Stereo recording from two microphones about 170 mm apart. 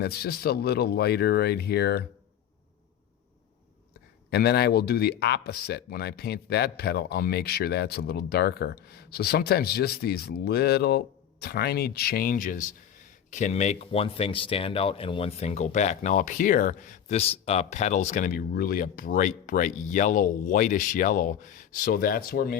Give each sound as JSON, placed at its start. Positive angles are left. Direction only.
{"t": 0.0, "sound": "speech", "side_deg": 70}
{"t": 4.3, "sound": "speech", "side_deg": 70}
{"t": 13.3, "sound": "speech", "side_deg": 45}